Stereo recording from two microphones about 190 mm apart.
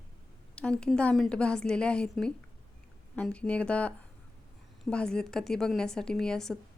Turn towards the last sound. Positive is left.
turn(degrees=5)  # may be behind; listen again after turning